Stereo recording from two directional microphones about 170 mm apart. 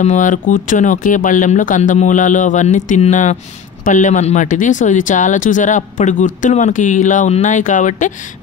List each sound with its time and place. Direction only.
0.0 s speech: 50° left (ahead or behind)